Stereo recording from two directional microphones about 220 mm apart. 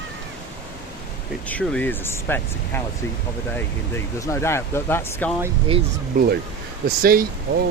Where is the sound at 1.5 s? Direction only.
5° left (ahead or behind).